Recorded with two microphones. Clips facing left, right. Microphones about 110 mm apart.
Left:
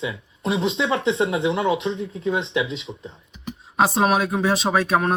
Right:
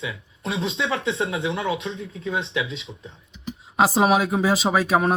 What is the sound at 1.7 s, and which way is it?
Speech, 35° left (ahead or behind).